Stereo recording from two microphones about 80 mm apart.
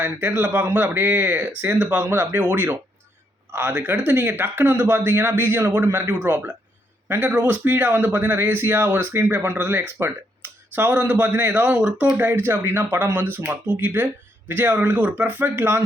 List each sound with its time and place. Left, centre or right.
0.3 s speech: right